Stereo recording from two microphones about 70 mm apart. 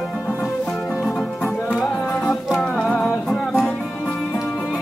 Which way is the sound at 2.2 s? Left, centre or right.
Centre.